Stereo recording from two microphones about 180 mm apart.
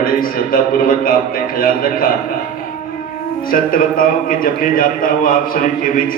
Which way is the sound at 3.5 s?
50° left (ahead or behind).